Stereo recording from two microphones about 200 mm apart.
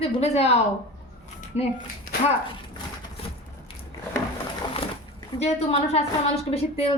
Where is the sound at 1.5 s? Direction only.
35° left (ahead or behind).